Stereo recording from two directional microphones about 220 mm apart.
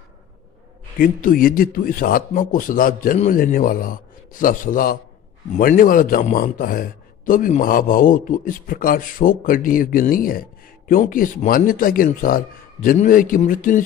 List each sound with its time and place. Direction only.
0.9 s a man's voice: 40° left (ahead or behind)